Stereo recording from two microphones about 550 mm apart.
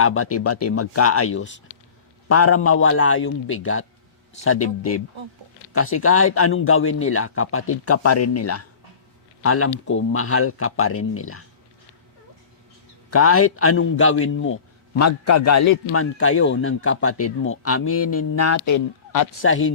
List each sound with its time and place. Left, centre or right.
0.0 s a man's voice: left
13.1 s a man's voice: left
19.4 s a man's voice: left